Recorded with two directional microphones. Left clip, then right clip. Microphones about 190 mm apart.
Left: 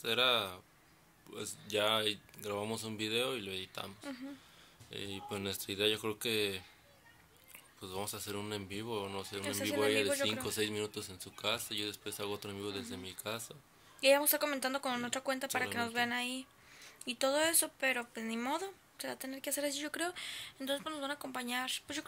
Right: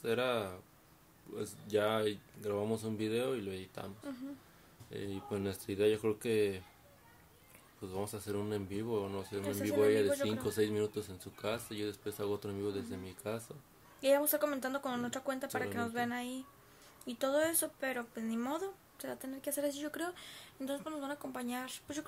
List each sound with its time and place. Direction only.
0.0 s speech: 15° right (ahead or behind)
4.9 s speech: 15° right (ahead or behind)
7.8 s speech: 15° right (ahead or behind)
9.4 s speech: 10° left (ahead or behind)
9.8 s speech: 15° right (ahead or behind)
10.1 s speech: 15° left (ahead or behind)
10.4 s speech: 15° right (ahead or behind)
14.0 s speech: 10° left (ahead or behind)